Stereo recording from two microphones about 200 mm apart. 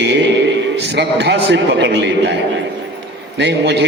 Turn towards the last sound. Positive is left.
turn(degrees=-60)  # may be behind; listen again after turning